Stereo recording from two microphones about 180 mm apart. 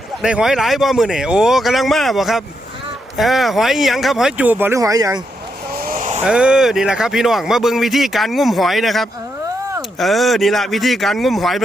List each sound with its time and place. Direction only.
0.2 s a man's voice: 5° right (ahead or behind); by 5.2 s 20° right (ahead or behind)
5.7 s vehicle: 50° right (ahead or behind)
6.2 s a man's voice: 5° right (ahead or behind)